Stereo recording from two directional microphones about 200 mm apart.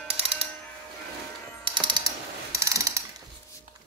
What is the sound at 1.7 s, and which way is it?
Mechanisms, 20° right (ahead or behind).